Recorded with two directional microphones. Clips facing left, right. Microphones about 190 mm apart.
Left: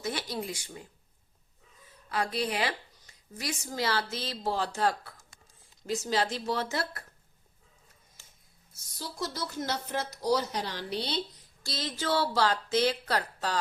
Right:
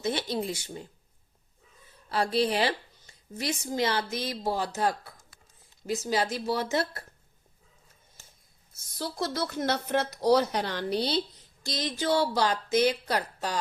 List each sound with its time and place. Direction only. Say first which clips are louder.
0.0 s a woman's voice: right 5 dB; 25° right (ahead or behind)
2.0 s a woman's voice: right 5 dB; 30° right (ahead or behind); by 4.7 s 10° right (ahead or behind)
5.8 s speech: right 1 dB; 15° right (ahead or behind)
9.0 s speech: right 5 dB; 60° right (ahead or behind); by 11.2 s 40° right (ahead or behind)
11.6 s speech: right 4 dB; 15° right (ahead or behind)